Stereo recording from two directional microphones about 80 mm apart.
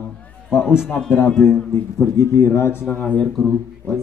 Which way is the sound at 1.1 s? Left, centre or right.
Left.